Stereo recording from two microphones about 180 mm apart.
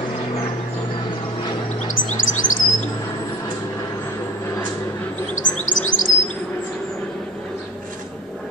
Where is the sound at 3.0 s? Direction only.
20° left (ahead or behind).